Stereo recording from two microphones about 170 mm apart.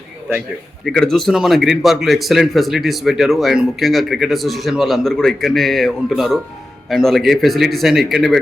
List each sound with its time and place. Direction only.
0.9 s speech: centre (ahead or behind)